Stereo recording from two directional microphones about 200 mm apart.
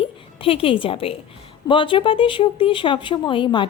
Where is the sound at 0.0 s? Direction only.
25° left (ahead or behind).